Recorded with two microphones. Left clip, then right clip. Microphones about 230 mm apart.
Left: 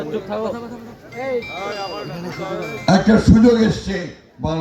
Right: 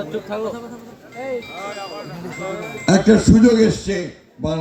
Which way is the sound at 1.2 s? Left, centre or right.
Left.